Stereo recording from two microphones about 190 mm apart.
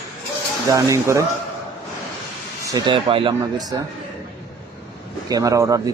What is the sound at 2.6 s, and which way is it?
Speech, 20° right (ahead or behind).